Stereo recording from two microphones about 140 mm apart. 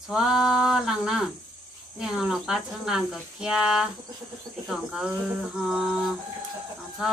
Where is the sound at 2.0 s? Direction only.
5° right (ahead or behind).